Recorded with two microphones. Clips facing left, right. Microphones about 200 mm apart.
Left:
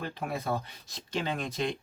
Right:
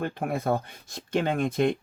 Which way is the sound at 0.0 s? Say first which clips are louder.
Right 6 dB; 50° right (ahead or behind).